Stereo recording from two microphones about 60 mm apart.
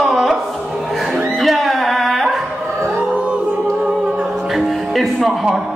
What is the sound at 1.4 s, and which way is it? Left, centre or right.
Music, centre.